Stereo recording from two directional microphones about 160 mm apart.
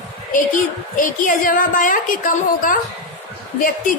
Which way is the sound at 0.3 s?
55° left (ahead or behind).